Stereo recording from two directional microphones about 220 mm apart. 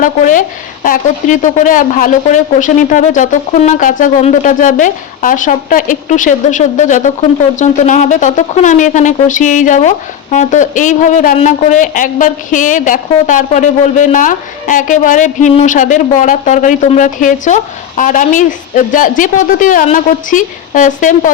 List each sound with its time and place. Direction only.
0.0 s speech: 35° left (ahead or behind)